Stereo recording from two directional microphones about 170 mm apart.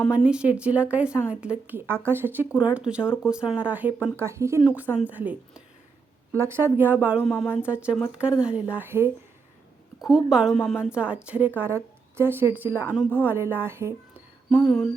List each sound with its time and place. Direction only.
0.3 s speech: 5° right (ahead or behind)
7.3 s speech: 10° left (ahead or behind)
7.7 s speech: 5° right (ahead or behind)
14.5 s speech: 5° left (ahead or behind)